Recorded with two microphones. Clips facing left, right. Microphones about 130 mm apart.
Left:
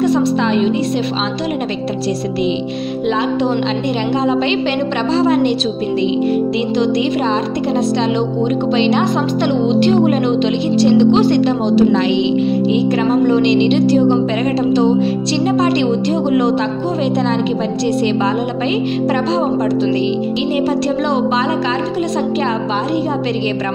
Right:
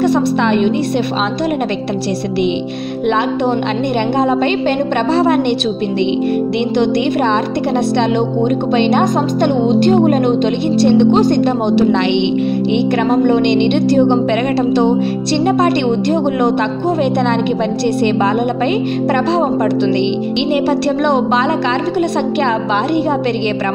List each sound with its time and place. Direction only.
0.0 s speech: 60° right (ahead or behind)
5.1 s speech: 55° right (ahead or behind)
8.7 s speech: 50° right (ahead or behind)